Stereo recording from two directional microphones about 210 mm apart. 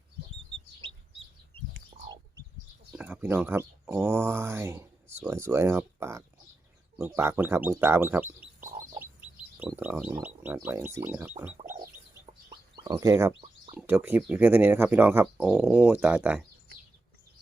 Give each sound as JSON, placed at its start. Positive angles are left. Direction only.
{"t": 1.9, "sound": "bird", "side_deg": -20}
{"t": 2.9, "sound": "speech", "side_deg": -10}
{"t": 9.6, "sound": "speech", "side_deg": -5}
{"t": 12.2, "sound": "chicken", "side_deg": -20}
{"t": 13.7, "sound": "speech", "side_deg": -10}